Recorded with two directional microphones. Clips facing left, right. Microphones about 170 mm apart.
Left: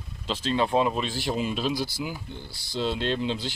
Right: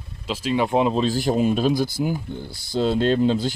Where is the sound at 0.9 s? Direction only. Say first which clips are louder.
Right 8 dB; 40° right (ahead or behind).